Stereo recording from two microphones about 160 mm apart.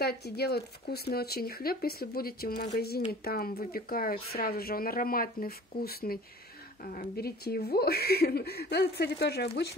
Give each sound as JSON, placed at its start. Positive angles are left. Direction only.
{"t": 0.0, "sound": "speech", "side_deg": 90}
{"t": 6.8, "sound": "speech", "side_deg": 60}